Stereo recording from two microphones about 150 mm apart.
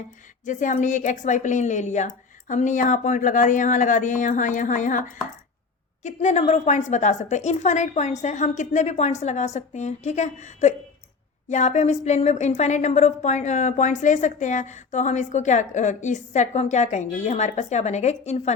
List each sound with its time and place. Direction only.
0.4 s a woman's voice: 55° left (ahead or behind)